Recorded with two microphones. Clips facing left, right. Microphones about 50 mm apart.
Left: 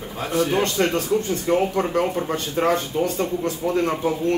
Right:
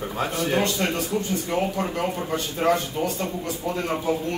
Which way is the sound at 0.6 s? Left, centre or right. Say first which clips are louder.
Left 3 dB; left.